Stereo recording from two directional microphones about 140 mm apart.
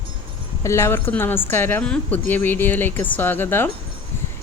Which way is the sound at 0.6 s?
20° left (ahead or behind).